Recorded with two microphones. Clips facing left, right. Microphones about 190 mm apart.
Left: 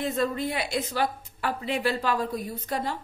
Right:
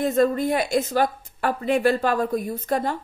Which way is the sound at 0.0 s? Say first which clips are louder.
Right 7 dB; 50° right (ahead or behind).